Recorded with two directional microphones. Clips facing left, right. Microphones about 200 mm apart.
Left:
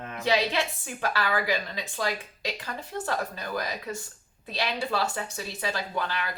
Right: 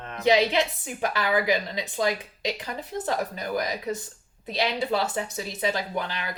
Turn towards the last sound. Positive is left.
turn(degrees=-20)  # may be behind; listen again after turning